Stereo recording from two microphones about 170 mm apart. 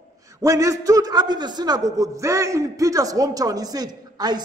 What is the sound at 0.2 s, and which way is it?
A man's voice, 20° right (ahead or behind).